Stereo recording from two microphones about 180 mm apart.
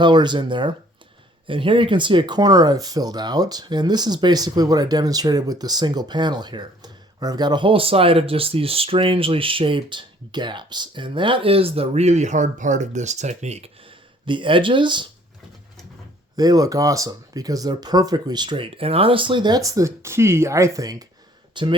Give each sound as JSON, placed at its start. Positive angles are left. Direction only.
{"t": 0.0, "sound": "speech", "side_deg": -25}
{"t": 16.3, "sound": "speech", "side_deg": -20}